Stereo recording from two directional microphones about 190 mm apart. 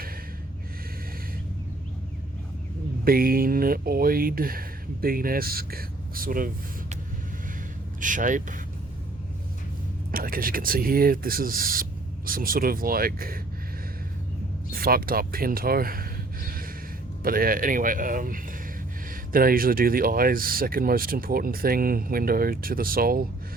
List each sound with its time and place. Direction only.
3.0 s speech: 50° right (ahead or behind)
8.0 s speech: 45° right (ahead or behind)
10.1 s speech: 50° right (ahead or behind)
14.7 s speech: 50° right (ahead or behind)